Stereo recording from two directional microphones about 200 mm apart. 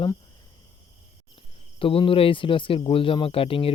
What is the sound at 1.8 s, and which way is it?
Speech, 25° left (ahead or behind).